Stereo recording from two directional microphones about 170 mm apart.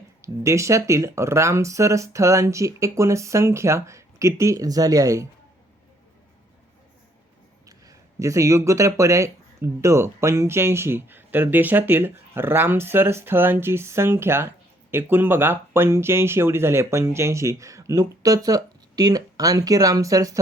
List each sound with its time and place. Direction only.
0.2 s speech: 15° right (ahead or behind)
7.7 s speech: 20° right (ahead or behind)